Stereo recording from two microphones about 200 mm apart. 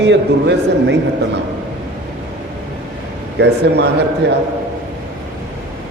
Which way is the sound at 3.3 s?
60° right (ahead or behind).